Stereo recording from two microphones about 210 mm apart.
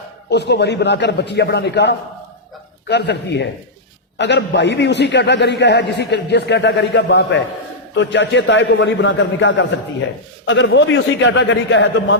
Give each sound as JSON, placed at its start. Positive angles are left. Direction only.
{"t": 0.3, "sound": "a man's voice", "side_deg": 55}